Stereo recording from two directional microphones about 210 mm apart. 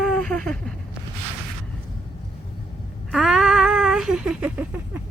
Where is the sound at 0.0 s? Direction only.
5° left (ahead or behind).